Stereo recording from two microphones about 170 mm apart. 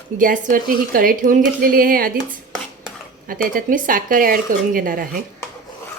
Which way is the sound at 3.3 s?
55° right (ahead or behind).